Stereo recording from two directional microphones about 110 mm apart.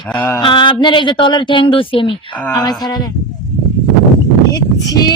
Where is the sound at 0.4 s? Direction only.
45° left (ahead or behind).